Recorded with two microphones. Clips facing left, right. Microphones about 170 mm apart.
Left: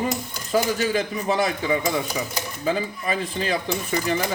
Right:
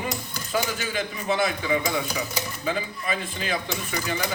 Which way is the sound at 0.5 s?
35° left (ahead or behind).